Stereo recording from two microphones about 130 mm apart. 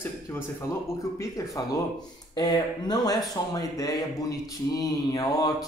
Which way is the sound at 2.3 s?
30° left (ahead or behind).